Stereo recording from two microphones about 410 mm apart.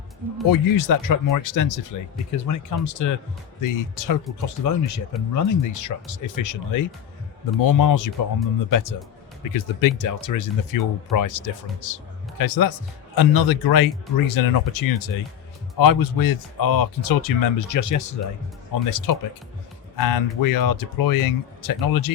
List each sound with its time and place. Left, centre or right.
0.4 s speech: left